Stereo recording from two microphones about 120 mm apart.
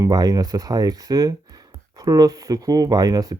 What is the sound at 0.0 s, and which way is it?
Speech, 30° right (ahead or behind).